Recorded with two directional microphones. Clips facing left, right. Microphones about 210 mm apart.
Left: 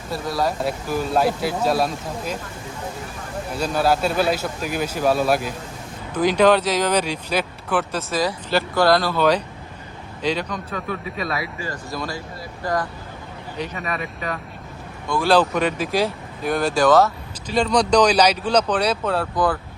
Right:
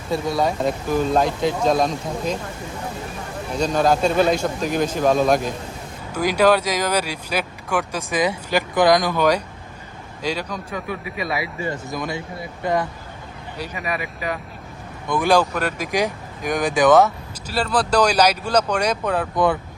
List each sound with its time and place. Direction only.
0.1 s speech: centre (ahead or behind)
3.5 s speech: 5° left (ahead or behind)
6.1 s speech: 10° right (ahead or behind)
11.3 s speech: 25° right (ahead or behind)
13.7 s speech: centre (ahead or behind)
15.0 s speech: 15° right (ahead or behind)
17.5 s speech: 5° right (ahead or behind)